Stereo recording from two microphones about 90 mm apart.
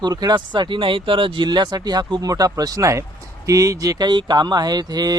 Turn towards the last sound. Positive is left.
turn(degrees=-45)  # may be behind; listen again after turning